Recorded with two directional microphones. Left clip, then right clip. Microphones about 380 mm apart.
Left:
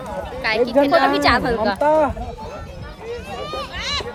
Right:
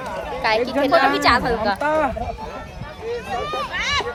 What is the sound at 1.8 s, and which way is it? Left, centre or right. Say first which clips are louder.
Speech: left 7 dB; left.